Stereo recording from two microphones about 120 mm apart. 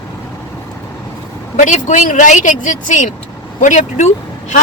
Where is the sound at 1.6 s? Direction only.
90° left.